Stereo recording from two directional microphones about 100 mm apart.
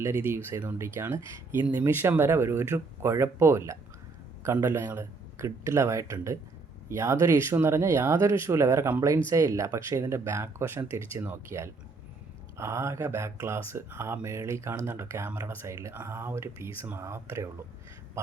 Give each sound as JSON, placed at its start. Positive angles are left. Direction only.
{"t": 0.0, "sound": "speech", "side_deg": -25}